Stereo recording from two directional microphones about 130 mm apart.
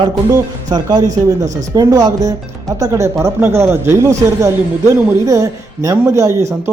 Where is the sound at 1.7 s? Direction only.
30° right (ahead or behind).